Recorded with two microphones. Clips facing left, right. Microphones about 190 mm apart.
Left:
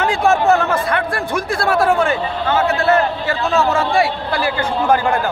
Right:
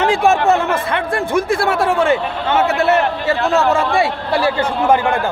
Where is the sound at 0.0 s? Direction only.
25° right (ahead or behind).